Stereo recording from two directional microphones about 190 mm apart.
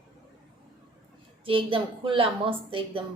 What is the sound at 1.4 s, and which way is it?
A woman's voice, 30° right (ahead or behind).